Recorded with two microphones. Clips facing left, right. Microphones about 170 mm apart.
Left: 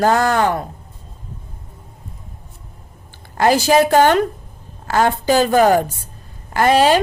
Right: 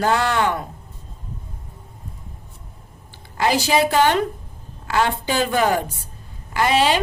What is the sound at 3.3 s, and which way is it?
A woman's voice, 45° left (ahead or behind).